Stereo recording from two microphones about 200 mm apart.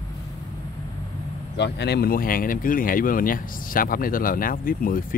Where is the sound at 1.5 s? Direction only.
60° left (ahead or behind).